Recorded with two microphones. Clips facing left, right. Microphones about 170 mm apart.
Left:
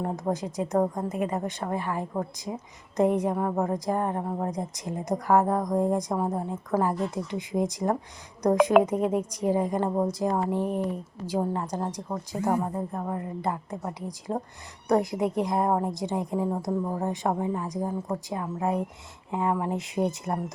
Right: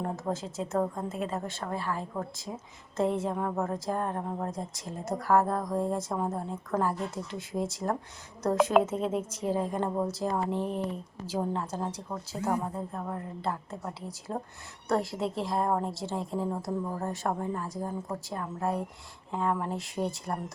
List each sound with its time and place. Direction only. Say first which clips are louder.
0.0 s a woman's voice: left 4 dB; 15° left (ahead or behind)